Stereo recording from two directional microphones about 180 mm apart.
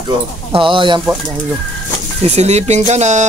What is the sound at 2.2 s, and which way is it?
Speech, 35° right (ahead or behind).